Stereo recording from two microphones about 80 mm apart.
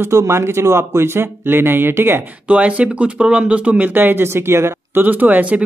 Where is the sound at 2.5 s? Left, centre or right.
Centre; by 5.0 s right.